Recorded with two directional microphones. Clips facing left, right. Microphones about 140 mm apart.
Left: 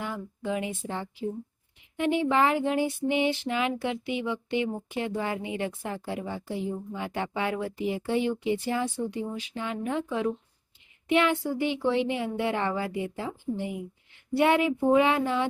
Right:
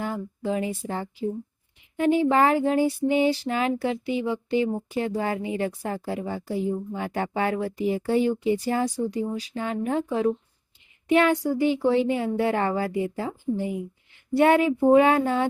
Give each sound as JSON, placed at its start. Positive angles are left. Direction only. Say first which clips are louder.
{"t": 0.0, "sound": "speech", "louder": "right 4 dB", "side_deg": -40}
{"t": 2.0, "sound": "a sound", "louder": "right 4 dB", "side_deg": -40}
{"t": 14.3, "sound": "speech", "louder": "right 4 dB", "side_deg": -45}